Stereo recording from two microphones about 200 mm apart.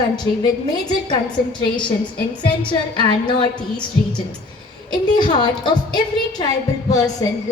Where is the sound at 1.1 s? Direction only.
25° left (ahead or behind).